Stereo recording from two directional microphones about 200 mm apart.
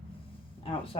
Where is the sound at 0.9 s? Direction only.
25° left (ahead or behind).